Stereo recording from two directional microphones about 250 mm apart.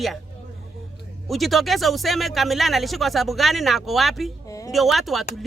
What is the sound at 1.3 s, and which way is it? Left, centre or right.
Speech, centre.